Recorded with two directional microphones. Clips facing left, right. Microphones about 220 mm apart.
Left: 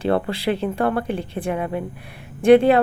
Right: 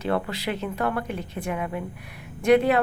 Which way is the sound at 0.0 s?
30° left (ahead or behind).